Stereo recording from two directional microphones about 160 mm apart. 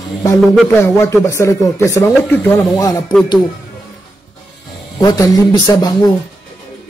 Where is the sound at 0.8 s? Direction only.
15° left (ahead or behind).